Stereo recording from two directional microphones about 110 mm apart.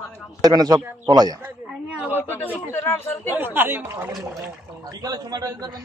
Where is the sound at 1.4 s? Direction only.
15° right (ahead or behind).